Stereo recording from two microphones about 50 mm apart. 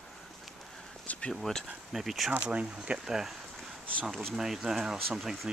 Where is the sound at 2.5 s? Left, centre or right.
Right.